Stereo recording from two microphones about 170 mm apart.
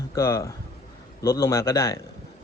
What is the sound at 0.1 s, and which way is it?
Speech, 15° left (ahead or behind).